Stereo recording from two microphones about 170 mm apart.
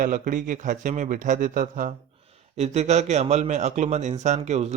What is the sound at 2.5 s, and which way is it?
A man's voice, 40° right (ahead or behind).